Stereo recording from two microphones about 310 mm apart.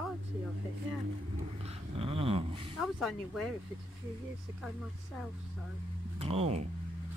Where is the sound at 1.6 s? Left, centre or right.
Centre.